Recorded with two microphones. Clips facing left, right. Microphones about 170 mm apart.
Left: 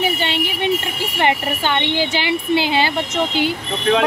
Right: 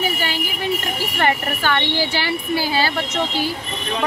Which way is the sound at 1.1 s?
20° left (ahead or behind).